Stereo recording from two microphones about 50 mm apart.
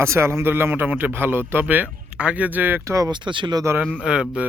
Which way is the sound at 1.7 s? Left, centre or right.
Right.